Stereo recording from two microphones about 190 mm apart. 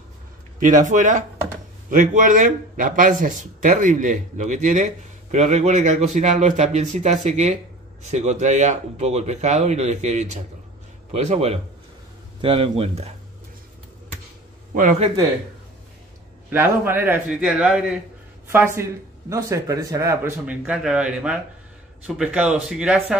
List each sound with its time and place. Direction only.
0.6 s speech: 45° right (ahead or behind)
14.7 s a man's voice: 40° right (ahead or behind)
16.4 s speech: 10° right (ahead or behind)